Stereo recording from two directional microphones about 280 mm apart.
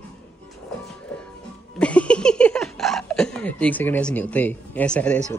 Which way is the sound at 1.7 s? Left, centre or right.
Centre.